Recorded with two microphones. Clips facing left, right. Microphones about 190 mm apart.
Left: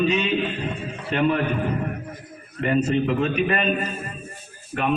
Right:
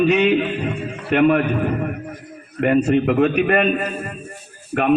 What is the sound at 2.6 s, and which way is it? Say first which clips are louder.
A man's voice: right 5 dB; 60° right (ahead or behind).